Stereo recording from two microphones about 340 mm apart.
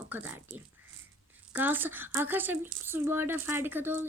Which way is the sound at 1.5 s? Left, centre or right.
Centre.